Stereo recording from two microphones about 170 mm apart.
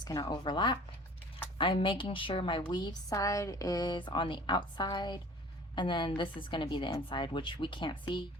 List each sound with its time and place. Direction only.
0.0 s a woman's voice: 25° left (ahead or behind)